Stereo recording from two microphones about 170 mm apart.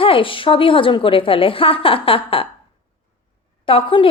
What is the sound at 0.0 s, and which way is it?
A woman's voice, 30° left (ahead or behind).